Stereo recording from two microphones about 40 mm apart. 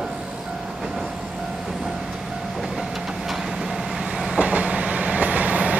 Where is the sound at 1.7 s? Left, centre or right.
Centre.